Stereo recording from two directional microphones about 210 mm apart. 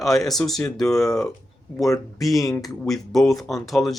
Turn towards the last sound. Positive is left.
turn(degrees=0)  # may be behind; listen again after turning